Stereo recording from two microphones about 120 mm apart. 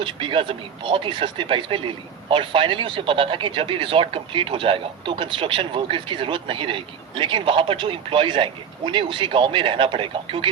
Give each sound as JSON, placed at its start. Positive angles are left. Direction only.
{"t": 0.0, "sound": "speech", "side_deg": -45}